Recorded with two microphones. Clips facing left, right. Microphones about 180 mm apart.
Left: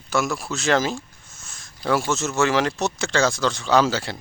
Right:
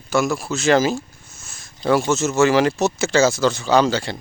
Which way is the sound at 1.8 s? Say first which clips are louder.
Right 4 dB; 20° right (ahead or behind).